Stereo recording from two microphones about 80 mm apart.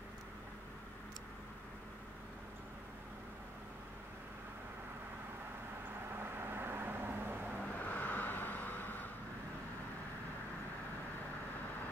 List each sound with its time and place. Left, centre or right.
6.1 s vehicle: right
7.6 s vehicle: centre